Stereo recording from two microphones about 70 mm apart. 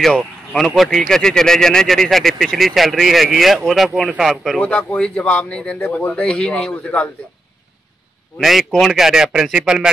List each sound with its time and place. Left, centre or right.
0.0 s speech: centre
4.6 s speech: left
6.7 s speech: centre
8.4 s speech: centre